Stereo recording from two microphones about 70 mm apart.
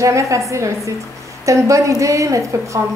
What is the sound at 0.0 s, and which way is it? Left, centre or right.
A woman's voice, right.